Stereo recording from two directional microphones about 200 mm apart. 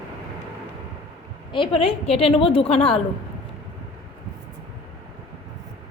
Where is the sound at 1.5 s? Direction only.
25° left (ahead or behind).